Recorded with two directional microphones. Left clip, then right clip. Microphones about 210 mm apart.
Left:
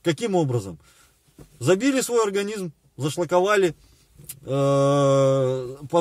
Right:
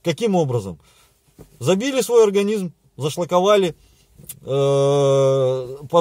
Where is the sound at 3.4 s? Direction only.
5° left (ahead or behind).